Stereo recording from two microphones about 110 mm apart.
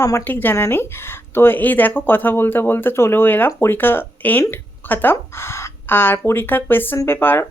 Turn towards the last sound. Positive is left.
turn(degrees=20)  # may be behind; listen again after turning